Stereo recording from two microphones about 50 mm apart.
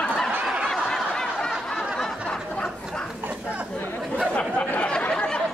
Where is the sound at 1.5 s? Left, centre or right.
Centre.